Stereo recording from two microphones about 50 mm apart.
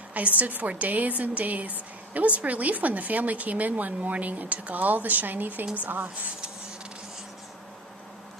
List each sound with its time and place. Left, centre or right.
0.1 s a woman's voice: right